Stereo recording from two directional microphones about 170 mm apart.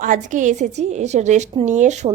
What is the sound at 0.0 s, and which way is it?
A woman's voice, 50° right (ahead or behind).